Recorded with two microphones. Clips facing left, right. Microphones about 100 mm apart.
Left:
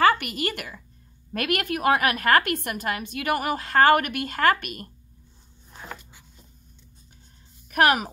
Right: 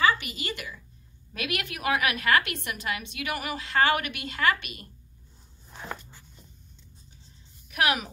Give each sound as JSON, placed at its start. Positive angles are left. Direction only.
{"t": 0.0, "sound": "a woman's voice", "side_deg": 55}
{"t": 7.6, "sound": "speech", "side_deg": 50}